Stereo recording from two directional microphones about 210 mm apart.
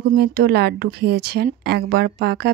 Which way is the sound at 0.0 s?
50° right (ahead or behind).